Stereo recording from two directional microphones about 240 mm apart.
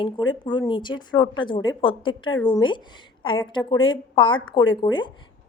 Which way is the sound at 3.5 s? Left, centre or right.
Centre.